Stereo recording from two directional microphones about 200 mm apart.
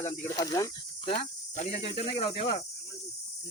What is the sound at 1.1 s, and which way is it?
Speech, 35° left (ahead or behind).